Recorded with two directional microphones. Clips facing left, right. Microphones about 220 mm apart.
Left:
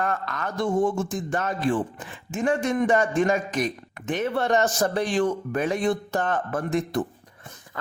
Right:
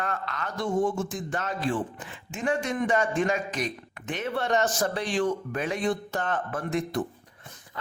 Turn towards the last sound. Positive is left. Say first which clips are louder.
# left 4 dB
turn(degrees=45)  # may be behind; listen again after turning